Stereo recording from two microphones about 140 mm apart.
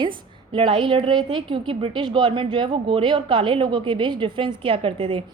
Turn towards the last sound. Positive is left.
turn(degrees=-40)  # may be behind; listen again after turning